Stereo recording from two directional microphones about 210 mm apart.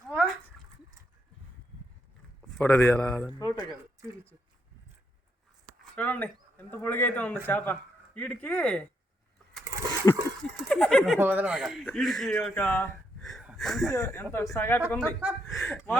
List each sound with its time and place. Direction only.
0.1 s a sound: centre (ahead or behind)
2.6 s speech: 10° left (ahead or behind)
5.8 s speech: 5° left (ahead or behind)
10.0 s speech: 15° left (ahead or behind)
10.7 s speech: 5° left (ahead or behind)
13.4 s a sound: centre (ahead or behind)
13.9 s speech: 15° left (ahead or behind)
15.5 s speech: centre (ahead or behind)